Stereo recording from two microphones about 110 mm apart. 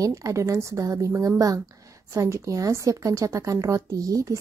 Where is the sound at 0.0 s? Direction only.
30° right (ahead or behind).